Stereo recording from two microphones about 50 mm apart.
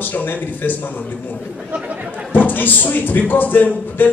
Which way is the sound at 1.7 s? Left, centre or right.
Right.